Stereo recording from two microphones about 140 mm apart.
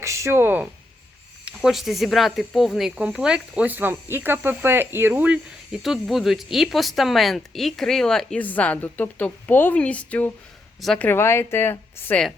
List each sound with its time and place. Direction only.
0.0 s speech: 20° right (ahead or behind)
1.5 s speech: centre (ahead or behind); by 12.2 s 15° left (ahead or behind)